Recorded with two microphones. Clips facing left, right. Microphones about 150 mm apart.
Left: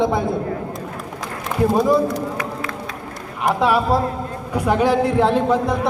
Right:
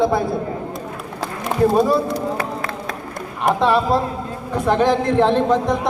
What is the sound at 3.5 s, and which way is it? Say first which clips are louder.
A man's voice: right 1 dB; 10° left (ahead or behind).